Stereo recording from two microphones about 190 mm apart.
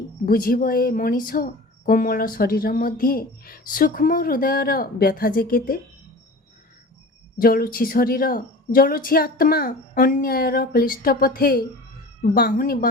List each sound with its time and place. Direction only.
0.3 s speech: 50° left (ahead or behind)
7.3 s speech: 50° left (ahead or behind)